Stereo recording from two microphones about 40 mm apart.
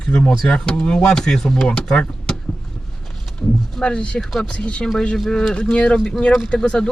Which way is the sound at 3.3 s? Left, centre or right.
Left.